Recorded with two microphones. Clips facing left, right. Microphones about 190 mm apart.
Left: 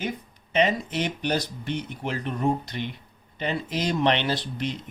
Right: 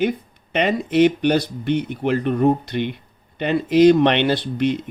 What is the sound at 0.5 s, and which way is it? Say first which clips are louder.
Speech: right 5 dB; 60° right (ahead or behind).